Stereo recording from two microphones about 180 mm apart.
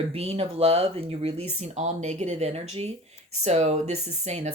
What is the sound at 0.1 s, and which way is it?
Speech, 35° right (ahead or behind).